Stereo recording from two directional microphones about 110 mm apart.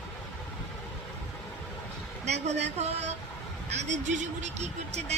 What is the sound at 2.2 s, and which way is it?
Speech, 90° right.